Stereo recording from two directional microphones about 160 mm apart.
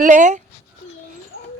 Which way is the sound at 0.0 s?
50° right (ahead or behind).